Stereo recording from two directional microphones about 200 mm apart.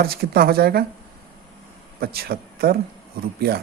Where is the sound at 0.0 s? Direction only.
50° right (ahead or behind).